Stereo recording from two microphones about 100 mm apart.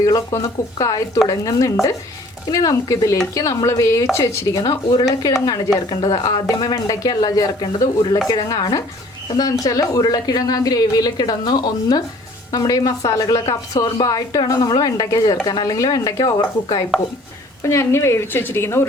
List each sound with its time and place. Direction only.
0.0 s speech: 40° left (ahead or behind)
4.6 s speech: 45° left (ahead or behind)
5.9 s a woman's voice: 50° left (ahead or behind)
17.6 s speech: 30° left (ahead or behind)